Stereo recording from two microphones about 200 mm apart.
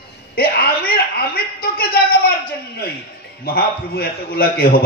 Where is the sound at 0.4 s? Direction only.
50° left (ahead or behind).